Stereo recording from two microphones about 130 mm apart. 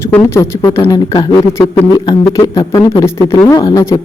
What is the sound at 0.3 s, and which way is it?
Speech, 20° left (ahead or behind).